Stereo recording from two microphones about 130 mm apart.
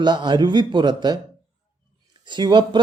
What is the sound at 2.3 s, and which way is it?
Speech, 35° right (ahead or behind).